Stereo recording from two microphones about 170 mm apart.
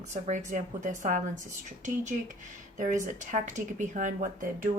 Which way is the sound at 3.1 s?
45° right (ahead or behind).